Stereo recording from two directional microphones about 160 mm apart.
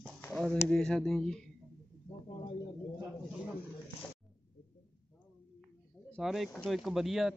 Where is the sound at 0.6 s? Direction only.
5° left (ahead or behind).